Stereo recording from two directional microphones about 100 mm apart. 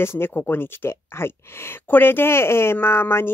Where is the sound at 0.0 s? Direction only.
25° left (ahead or behind).